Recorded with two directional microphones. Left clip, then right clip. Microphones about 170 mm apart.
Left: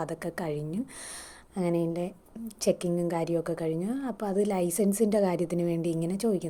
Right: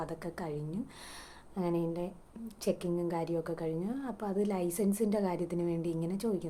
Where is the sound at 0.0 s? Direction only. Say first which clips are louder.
Left 6 dB; 35° left (ahead or behind).